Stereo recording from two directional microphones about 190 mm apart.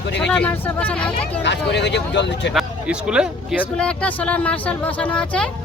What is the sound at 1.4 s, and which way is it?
Speech, 65° left (ahead or behind).